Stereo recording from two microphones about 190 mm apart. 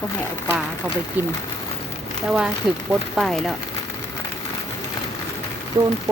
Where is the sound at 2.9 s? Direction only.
Centre (ahead or behind).